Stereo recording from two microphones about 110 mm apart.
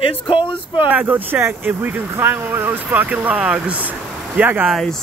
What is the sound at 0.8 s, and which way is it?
Speech, 15° right (ahead or behind).